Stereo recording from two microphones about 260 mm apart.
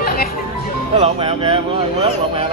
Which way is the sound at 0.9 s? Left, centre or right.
Right.